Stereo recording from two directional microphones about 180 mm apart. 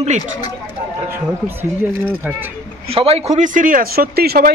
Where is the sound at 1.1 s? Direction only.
10° right (ahead or behind).